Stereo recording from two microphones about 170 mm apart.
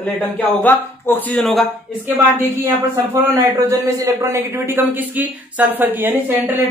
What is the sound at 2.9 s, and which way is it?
A man's voice, 20° right (ahead or behind).